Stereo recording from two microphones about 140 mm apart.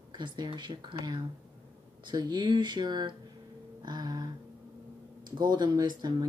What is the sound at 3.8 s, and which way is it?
Music, 30° right (ahead or behind).